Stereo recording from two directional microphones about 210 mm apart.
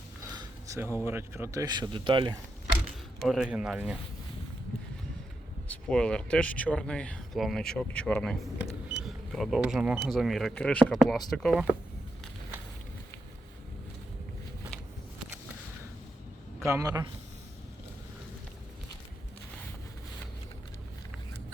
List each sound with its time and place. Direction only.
0.3 s a sound: 15° right (ahead or behind)
0.9 s speech: 10° right (ahead or behind)
3.2 s speech: centre (ahead or behind)
5.6 s speech: 5° left (ahead or behind)
16.6 s a man's voice: 15° right (ahead or behind)